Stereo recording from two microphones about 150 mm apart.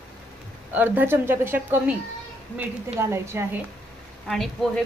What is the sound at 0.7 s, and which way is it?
Speech, 15° right (ahead or behind).